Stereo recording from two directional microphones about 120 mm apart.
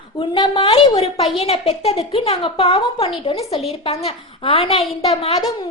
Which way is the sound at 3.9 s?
55° left (ahead or behind).